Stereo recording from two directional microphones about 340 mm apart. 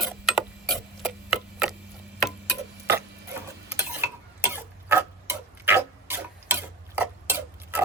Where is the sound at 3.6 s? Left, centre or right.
Centre.